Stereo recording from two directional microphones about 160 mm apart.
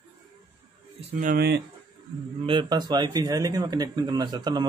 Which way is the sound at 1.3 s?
90° right.